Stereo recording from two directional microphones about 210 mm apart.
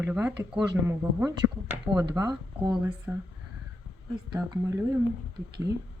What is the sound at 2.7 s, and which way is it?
Speech, 5° right (ahead or behind).